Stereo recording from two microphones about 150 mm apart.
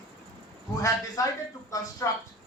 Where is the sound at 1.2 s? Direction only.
20° left (ahead or behind).